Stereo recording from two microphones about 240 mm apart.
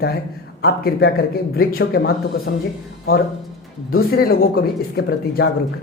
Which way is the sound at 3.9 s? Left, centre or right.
Left.